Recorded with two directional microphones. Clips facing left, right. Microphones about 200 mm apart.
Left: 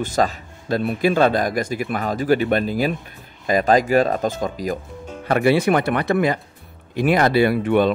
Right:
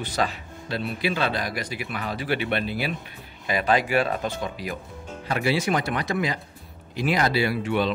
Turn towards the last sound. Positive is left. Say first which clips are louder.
# left 7 dB
turn(degrees=55)  # may be behind; listen again after turning